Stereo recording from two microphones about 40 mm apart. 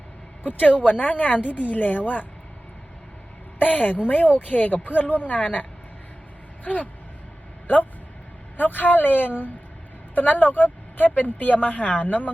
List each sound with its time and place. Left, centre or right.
0.4 s speech: left
3.6 s speech: left
8.5 s speech: left